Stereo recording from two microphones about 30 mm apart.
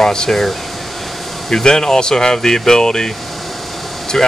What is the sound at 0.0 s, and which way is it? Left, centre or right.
Speech, left.